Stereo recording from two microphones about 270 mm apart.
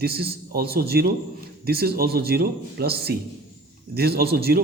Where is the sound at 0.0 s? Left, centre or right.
Right.